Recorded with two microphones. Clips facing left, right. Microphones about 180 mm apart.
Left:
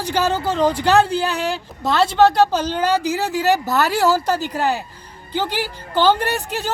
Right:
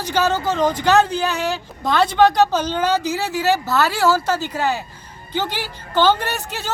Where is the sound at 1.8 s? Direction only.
5° left (ahead or behind).